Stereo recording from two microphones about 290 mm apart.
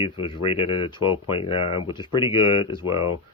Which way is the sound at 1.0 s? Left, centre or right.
Left.